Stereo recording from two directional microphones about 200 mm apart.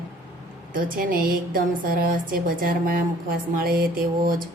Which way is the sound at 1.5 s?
45° right (ahead or behind).